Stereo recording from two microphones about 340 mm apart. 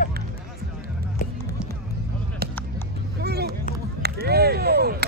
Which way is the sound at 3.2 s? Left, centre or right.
Right.